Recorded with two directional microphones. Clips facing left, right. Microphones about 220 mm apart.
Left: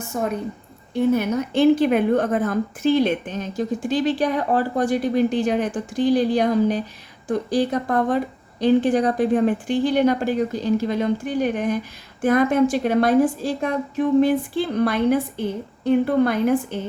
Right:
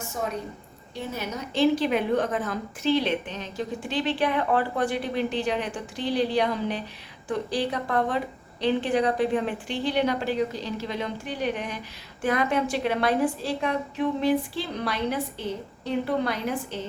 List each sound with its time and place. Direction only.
0.1 s a woman's voice: 55° left (ahead or behind)